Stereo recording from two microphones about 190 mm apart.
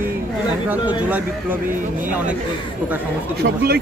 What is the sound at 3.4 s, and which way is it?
Speech, 65° right (ahead or behind).